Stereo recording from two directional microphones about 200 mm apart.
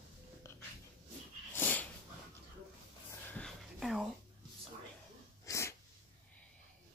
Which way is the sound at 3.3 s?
5° left (ahead or behind).